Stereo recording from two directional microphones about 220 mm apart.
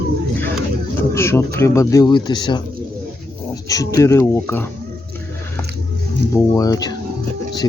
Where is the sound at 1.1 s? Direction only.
10° left (ahead or behind).